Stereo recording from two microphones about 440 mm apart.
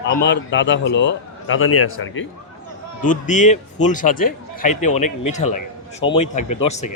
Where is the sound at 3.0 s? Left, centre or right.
Centre.